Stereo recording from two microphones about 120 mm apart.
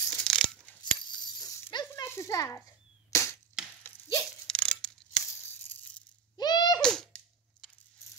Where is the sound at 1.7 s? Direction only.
35° left (ahead or behind).